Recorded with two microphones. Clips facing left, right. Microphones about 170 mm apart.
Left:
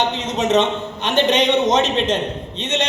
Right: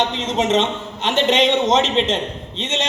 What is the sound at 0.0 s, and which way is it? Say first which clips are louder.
A man's voice: even; 25° right (ahead or behind).